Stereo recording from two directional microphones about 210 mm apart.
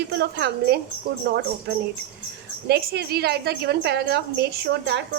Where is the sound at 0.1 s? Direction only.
50° right (ahead or behind).